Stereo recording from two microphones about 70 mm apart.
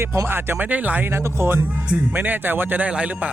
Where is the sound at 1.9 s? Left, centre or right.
Right.